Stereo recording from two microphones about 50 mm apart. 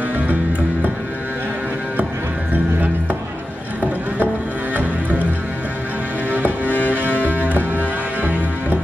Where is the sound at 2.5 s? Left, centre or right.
Right.